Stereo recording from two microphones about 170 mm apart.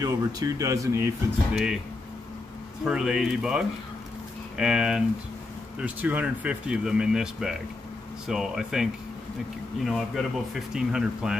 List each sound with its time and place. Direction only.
0.0 s speech: 20° right (ahead or behind)
1.5 s speech: 5° right (ahead or behind)
2.8 s speech: 5° right (ahead or behind)
9.8 s speech: centre (ahead or behind)